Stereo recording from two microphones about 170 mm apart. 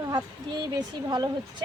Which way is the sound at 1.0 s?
25° right (ahead or behind).